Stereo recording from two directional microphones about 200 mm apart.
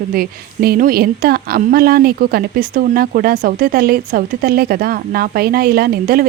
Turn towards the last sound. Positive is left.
turn(degrees=-45)  # may be behind; listen again after turning